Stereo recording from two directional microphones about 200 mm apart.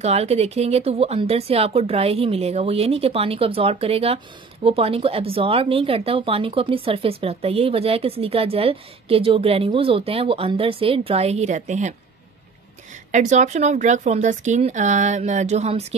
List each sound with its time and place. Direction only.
0.0 s speech: 30° right (ahead or behind)
13.1 s speech: 35° right (ahead or behind)